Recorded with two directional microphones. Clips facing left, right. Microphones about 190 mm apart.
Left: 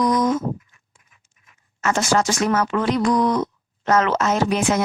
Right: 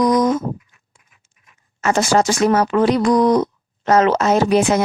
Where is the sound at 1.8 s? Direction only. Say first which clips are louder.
Right 4 dB; 35° right (ahead or behind).